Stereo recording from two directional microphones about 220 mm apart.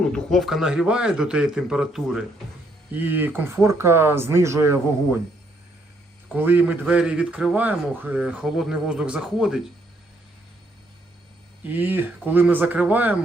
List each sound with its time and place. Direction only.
0.0 s a man's voice: 5° left (ahead or behind); by 4.8 s 10° right (ahead or behind)
6.3 s a man's voice: 10° right (ahead or behind)
11.7 s speech: 10° right (ahead or behind)